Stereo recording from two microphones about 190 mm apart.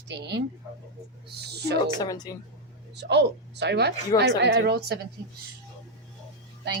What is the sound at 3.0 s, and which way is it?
Speech, 60° right (ahead or behind).